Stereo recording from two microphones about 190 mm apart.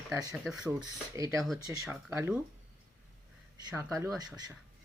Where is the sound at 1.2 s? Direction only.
15° right (ahead or behind).